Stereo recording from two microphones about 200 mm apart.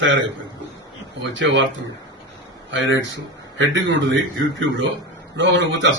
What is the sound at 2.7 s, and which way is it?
A man's voice, 70° right (ahead or behind).